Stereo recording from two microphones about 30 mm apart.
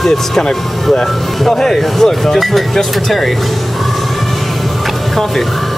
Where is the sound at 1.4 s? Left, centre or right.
Centre.